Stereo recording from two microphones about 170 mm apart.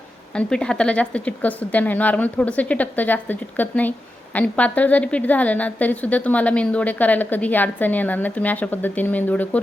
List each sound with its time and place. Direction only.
0.3 s a woman's voice: 5° left (ahead or behind)